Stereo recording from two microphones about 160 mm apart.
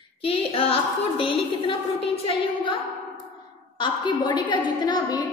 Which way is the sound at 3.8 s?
30° left (ahead or behind).